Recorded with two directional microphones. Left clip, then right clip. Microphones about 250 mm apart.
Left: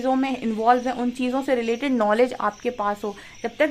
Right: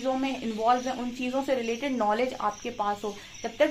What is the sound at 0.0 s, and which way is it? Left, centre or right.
Speech, left.